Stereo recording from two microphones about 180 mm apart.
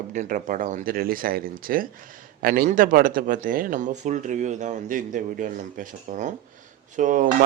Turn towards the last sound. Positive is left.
turn(degrees=-45)  # may be behind; listen again after turning